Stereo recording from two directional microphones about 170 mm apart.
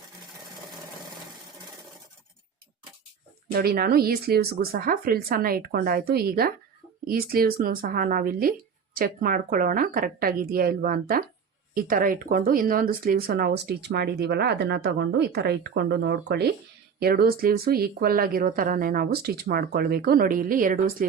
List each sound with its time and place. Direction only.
3.5 s speech: 65° right (ahead or behind)